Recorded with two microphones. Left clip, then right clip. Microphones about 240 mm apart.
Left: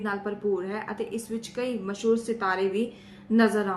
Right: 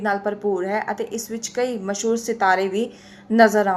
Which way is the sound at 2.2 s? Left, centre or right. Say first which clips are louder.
Right 8 dB; centre.